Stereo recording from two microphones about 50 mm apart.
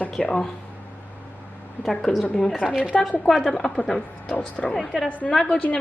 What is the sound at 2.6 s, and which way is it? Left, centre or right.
Speech, centre.